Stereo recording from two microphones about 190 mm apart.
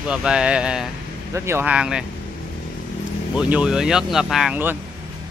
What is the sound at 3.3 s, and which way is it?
Speech, 5° right (ahead or behind).